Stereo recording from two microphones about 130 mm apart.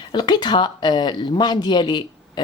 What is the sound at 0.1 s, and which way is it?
Speech, 35° left (ahead or behind).